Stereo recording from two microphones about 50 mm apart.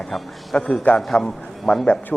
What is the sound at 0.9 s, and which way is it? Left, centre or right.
Speech, left.